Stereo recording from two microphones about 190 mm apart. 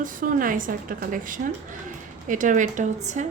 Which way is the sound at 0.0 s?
45° right (ahead or behind).